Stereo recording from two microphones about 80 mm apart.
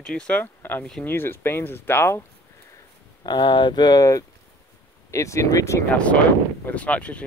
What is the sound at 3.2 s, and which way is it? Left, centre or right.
Speech, left.